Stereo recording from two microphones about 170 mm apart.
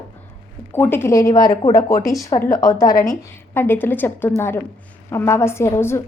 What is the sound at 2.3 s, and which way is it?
A woman's voice, 30° left (ahead or behind).